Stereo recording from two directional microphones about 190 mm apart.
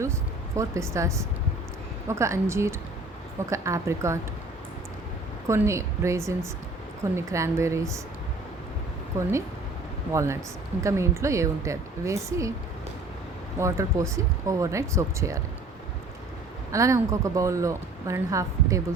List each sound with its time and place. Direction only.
0.0 s a woman's voice: 15° right (ahead or behind)
5.5 s a woman's voice: 15° right (ahead or behind)
9.1 s a woman's voice: 15° right (ahead or behind)
13.6 s a woman's voice: 15° right (ahead or behind)
16.7 s a woman's voice: 15° right (ahead or behind)